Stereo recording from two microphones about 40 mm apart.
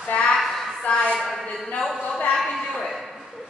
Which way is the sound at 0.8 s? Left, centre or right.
Left.